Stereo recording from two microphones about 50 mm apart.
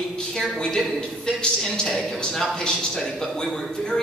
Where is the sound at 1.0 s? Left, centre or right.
Centre.